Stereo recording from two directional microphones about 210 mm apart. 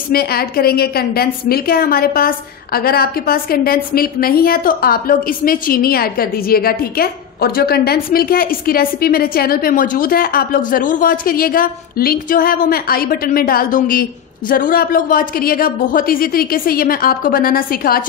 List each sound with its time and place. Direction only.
0.1 s a woman's voice: 45° left (ahead or behind)